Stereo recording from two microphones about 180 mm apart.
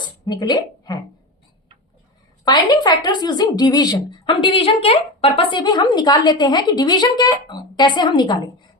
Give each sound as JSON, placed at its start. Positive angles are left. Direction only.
{"t": 0.0, "sound": "speech", "side_deg": 25}
{"t": 2.4, "sound": "a woman's voice", "side_deg": 20}